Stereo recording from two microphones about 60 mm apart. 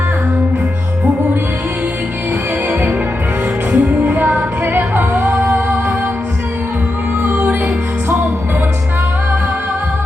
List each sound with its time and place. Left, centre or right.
3.7 s music: right
7.2 s music: right